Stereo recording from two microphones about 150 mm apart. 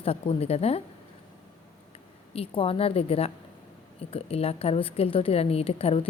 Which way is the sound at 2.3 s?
40° left (ahead or behind).